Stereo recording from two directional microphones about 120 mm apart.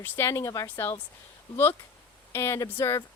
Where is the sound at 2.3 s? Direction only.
20° left (ahead or behind).